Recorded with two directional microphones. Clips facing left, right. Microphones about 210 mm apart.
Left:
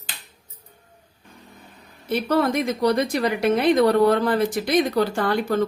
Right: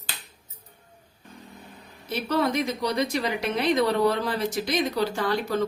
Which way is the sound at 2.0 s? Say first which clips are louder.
Left 4 dB; 55° left (ahead or behind).